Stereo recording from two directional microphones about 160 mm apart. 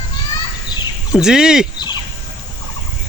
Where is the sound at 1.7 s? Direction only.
25° left (ahead or behind).